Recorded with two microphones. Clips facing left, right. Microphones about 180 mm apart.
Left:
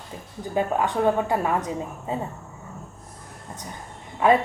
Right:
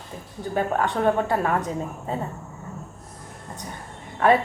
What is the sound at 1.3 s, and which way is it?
Speech, 10° left (ahead or behind).